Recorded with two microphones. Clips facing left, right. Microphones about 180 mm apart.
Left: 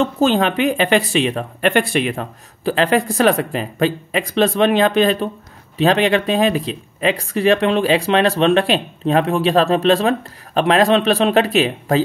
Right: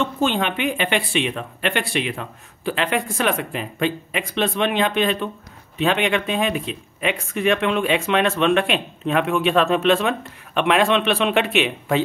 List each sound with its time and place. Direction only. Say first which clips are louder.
0.0 s speech: left 5 dB; 35° left (ahead or behind)